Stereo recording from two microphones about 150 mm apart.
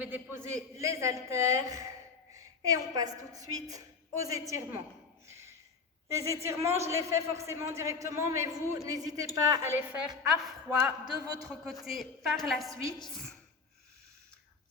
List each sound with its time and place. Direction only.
0.0 s a man's voice: 15° right (ahead or behind)
5.3 s a sound: 20° right (ahead or behind)
6.1 s a woman's voice: 20° right (ahead or behind)
10.1 s a woman's voice: 5° right (ahead or behind)
11.0 s a man's voice: 25° right (ahead or behind)
11.4 s a woman's voice: centre (ahead or behind)